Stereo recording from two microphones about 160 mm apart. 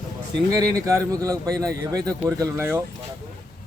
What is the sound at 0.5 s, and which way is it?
Speech, 20° right (ahead or behind).